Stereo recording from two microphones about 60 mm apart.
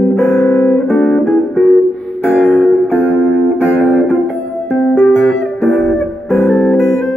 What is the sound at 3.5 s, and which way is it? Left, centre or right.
Music, left.